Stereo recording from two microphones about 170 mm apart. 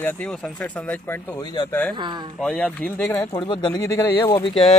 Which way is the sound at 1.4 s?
25° left (ahead or behind).